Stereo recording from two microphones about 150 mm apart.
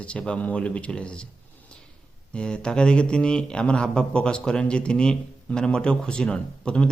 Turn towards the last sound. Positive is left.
turn(degrees=5)  # may be behind; listen again after turning